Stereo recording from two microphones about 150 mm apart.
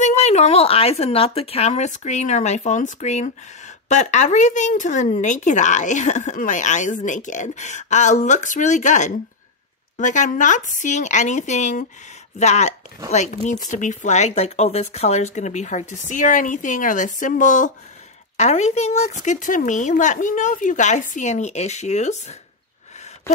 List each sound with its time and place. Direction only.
0.0 s speech: 50° left (ahead or behind)
18.4 s speech: 50° left (ahead or behind)